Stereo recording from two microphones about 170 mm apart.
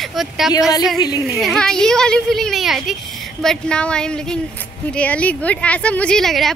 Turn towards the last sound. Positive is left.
turn(degrees=0)  # may be behind; listen again after turning